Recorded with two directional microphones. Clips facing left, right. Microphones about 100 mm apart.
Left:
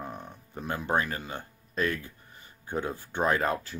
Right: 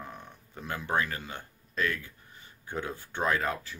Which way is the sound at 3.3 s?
40° left (ahead or behind).